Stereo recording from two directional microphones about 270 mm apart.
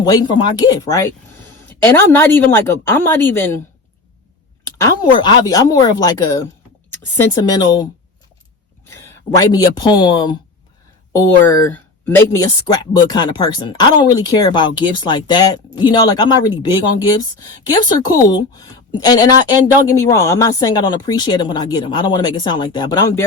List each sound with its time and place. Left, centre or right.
0.0 s speech: centre
4.6 s speech: centre
9.0 s speech: centre
17.6 s speech: centre